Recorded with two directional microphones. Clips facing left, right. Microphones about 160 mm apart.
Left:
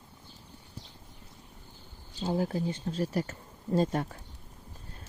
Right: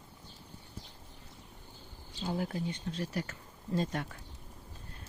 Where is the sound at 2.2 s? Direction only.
30° left (ahead or behind).